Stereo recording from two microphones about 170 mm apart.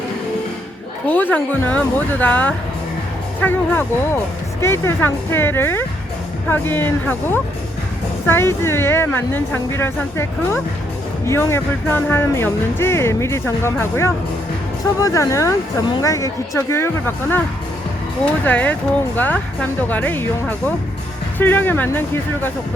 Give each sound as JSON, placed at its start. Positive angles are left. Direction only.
{"t": 1.0, "sound": "speech", "side_deg": 10}
{"t": 18.4, "sound": "speech", "side_deg": 10}
{"t": 21.3, "sound": "speech", "side_deg": 10}